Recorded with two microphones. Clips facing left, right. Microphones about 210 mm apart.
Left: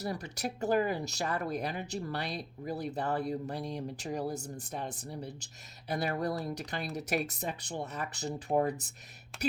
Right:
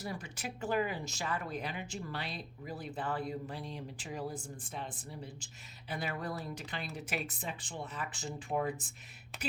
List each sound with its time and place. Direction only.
0.0 s speech: 40° left (ahead or behind)
9.3 s speech: centre (ahead or behind)